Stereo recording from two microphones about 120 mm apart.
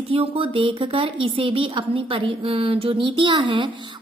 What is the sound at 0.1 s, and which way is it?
A woman's voice, 50° right (ahead or behind).